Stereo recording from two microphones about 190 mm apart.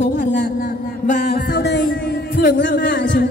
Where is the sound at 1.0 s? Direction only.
50° left (ahead or behind); by 1.9 s 65° left (ahead or behind).